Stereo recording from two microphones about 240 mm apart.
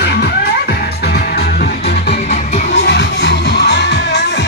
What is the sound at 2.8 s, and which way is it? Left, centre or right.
Music, left.